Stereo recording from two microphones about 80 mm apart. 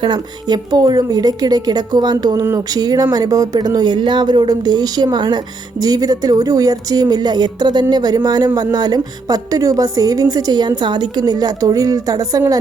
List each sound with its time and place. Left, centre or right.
0.0 s a woman's voice: right
5.8 s speech: right